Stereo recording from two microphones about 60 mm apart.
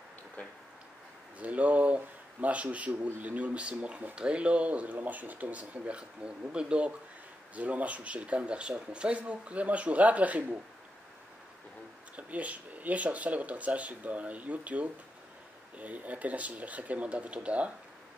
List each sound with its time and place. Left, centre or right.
0.4 s tick-tock: left
1.4 s speech: right
12.2 s speech: right